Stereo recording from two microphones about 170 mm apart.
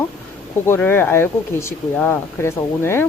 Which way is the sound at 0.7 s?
10° left (ahead or behind).